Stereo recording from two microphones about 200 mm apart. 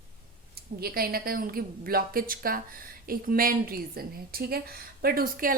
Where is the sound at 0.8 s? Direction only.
50° right (ahead or behind).